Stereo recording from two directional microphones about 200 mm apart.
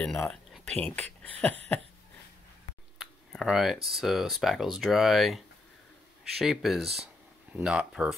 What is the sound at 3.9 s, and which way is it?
Speech, centre (ahead or behind).